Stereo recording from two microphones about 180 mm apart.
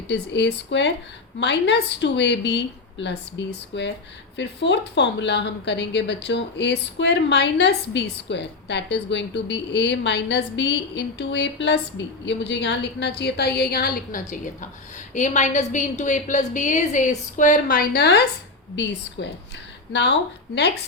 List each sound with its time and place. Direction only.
0.1 s a woman's voice: 70° left (ahead or behind)
19.2 s a woman's voice: 85° left
19.9 s a woman's voice: 75° left (ahead or behind)